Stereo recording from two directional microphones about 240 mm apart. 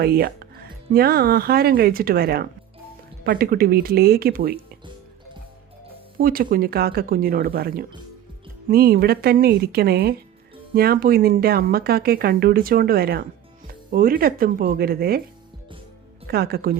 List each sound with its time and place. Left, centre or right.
0.0 s speech: right
6.1 s speech: right
16.2 s speech: right